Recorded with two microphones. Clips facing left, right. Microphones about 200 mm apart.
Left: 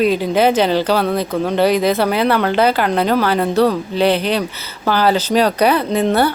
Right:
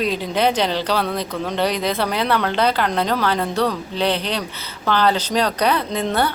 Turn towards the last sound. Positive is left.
turn(degrees=5)  # may be behind; listen again after turning